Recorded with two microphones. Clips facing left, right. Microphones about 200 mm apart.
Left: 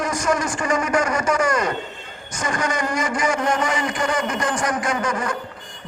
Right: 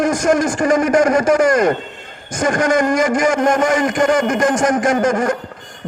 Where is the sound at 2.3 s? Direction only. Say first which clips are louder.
Right 9 dB; 45° right (ahead or behind).